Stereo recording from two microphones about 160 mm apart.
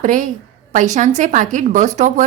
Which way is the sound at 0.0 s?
55° right (ahead or behind).